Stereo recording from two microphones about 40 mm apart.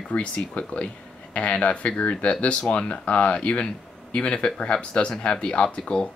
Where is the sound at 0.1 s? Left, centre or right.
Left.